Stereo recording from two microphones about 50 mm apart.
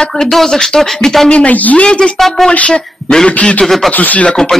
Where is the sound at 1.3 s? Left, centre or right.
Left.